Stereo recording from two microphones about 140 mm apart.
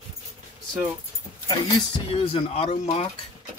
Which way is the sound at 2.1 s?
45° left (ahead or behind).